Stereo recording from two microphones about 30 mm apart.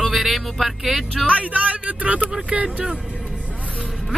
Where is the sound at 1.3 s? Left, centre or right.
Right.